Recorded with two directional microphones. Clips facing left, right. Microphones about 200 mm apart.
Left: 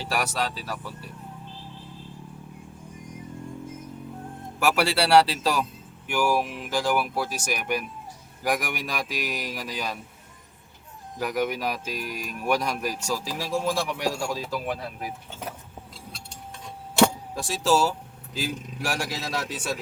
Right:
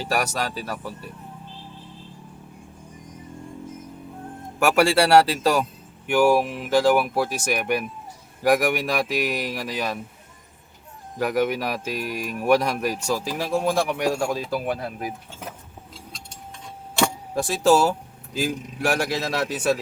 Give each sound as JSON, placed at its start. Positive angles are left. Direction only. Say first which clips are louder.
{"t": 0.0, "sound": "speech", "louder": "right 3 dB", "side_deg": -45}
{"t": 4.6, "sound": "speech", "louder": "right 5 dB", "side_deg": -50}
{"t": 6.1, "sound": "speech", "louder": "right 6 dB", "side_deg": -55}
{"t": 11.2, "sound": "speech", "louder": "right 4 dB", "side_deg": -60}
{"t": 17.3, "sound": "speech", "louder": "right 5 dB", "side_deg": -60}